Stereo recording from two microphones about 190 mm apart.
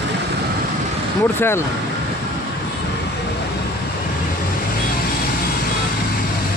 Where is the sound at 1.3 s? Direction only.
10° left (ahead or behind).